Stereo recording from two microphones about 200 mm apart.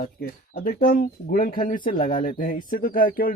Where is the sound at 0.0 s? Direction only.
50° left (ahead or behind).